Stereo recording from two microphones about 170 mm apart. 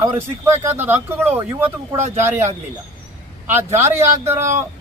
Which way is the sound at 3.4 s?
10° right (ahead or behind).